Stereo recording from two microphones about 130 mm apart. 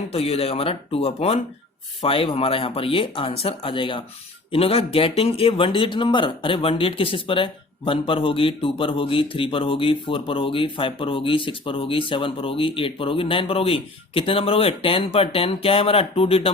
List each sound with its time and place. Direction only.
0.1 s a man's voice: 50° left (ahead or behind)